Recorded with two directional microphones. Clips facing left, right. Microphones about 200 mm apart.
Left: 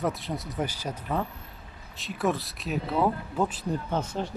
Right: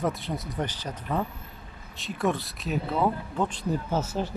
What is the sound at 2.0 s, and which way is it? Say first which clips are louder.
Speech: even; centre (ahead or behind).